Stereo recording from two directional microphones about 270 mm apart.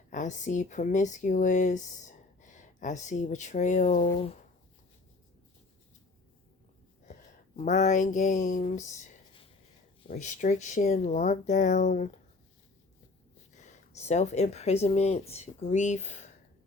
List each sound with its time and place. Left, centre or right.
0.1 s speech: left
7.0 s a sound: left
10.1 s speech: left
13.5 s speech: left